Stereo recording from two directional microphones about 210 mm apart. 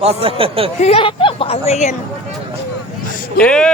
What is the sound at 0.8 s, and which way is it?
Speech, 25° left (ahead or behind).